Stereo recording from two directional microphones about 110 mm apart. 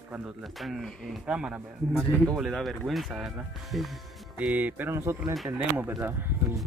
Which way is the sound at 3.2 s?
10° right (ahead or behind).